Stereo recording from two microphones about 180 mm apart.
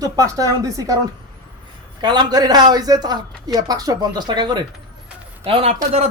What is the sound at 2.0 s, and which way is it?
A woman's voice, 25° right (ahead or behind).